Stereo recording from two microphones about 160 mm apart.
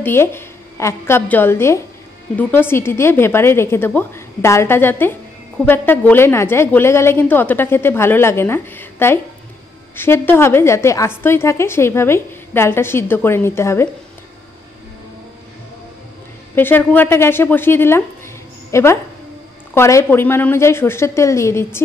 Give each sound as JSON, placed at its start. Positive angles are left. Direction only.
{"t": 0.0, "sound": "a woman's voice", "side_deg": 15}
{"t": 16.5, "sound": "a woman's voice", "side_deg": 10}